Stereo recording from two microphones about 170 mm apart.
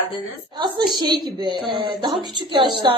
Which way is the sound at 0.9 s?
25° right (ahead or behind).